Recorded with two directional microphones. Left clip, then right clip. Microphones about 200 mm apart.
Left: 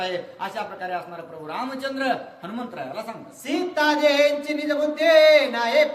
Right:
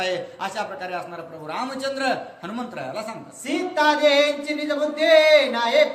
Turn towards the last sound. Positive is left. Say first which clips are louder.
# right 1 dB
turn(degrees=15)  # may be behind; listen again after turning